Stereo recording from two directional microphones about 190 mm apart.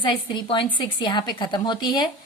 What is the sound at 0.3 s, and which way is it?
A woman's voice, 25° left (ahead or behind).